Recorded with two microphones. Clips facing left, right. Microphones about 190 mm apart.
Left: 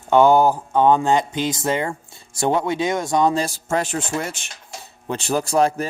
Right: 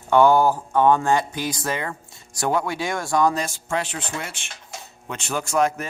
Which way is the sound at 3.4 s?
40° left (ahead or behind).